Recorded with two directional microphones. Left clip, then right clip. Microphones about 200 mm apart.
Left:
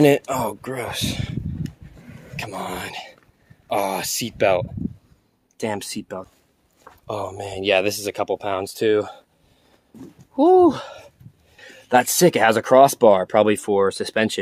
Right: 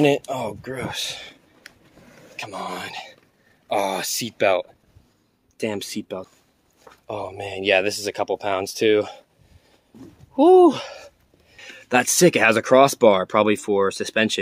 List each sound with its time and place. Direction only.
0.0 s speech: 25° left (ahead or behind); by 6.2 s centre (ahead or behind)
6.8 s a sound: 10° left (ahead or behind)
7.4 s speech: centre (ahead or behind)
10.3 s speech: 10° right (ahead or behind)